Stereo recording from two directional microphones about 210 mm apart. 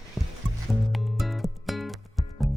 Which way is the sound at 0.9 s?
Centre (ahead or behind).